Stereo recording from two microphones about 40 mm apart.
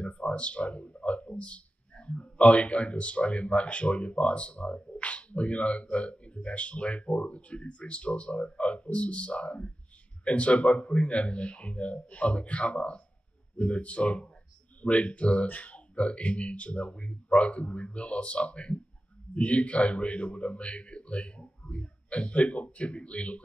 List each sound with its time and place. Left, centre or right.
0.0 s speech: left